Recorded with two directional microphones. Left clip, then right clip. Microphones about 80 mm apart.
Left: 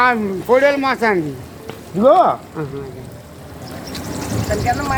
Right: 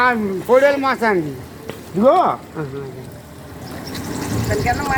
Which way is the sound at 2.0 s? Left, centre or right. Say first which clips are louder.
Left 2 dB; left.